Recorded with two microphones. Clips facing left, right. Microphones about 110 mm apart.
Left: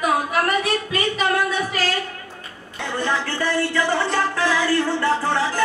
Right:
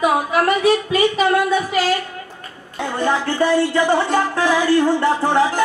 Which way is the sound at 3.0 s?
15° right (ahead or behind).